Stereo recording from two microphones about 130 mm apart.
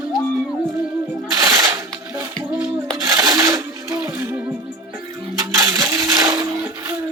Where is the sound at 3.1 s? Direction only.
25° right (ahead or behind).